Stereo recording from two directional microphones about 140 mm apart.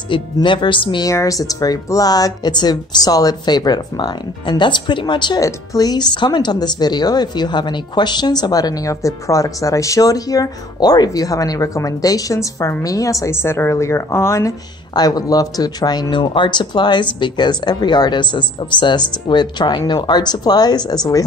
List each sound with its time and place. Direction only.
0.1 s speech: 35° left (ahead or behind)